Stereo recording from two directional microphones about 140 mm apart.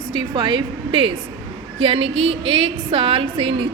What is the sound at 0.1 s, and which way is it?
A woman's voice, 35° right (ahead or behind).